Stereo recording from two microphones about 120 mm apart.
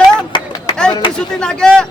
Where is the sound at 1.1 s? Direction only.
5° left (ahead or behind).